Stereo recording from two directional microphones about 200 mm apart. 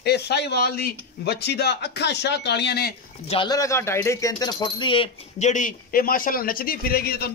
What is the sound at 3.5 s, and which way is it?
Speech, 15° left (ahead or behind).